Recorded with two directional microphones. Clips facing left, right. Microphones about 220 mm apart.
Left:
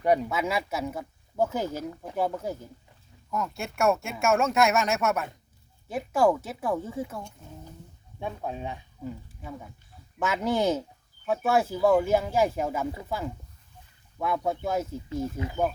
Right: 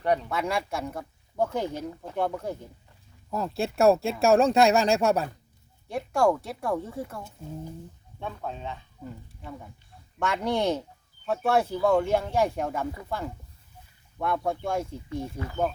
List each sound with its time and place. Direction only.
0.0 s speech: 10° left (ahead or behind)
3.2 s speech: 35° right (ahead or behind)
5.9 s speech: 5° left (ahead or behind)
8.2 s speech: 10° left (ahead or behind)